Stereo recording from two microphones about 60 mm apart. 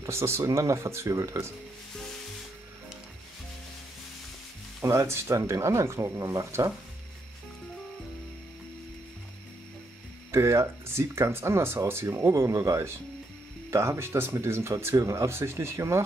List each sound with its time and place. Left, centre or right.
0.0 s speech: right
4.9 s speech: right
10.3 s speech: right